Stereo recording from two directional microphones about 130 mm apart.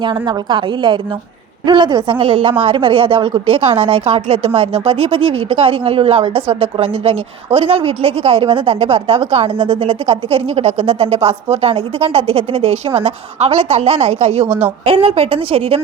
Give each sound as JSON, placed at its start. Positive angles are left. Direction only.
{"t": 0.0, "sound": "a woman's voice", "side_deg": -40}
{"t": 14.4, "sound": "a woman's voice", "side_deg": -15}
{"t": 14.8, "sound": "a woman's voice", "side_deg": -45}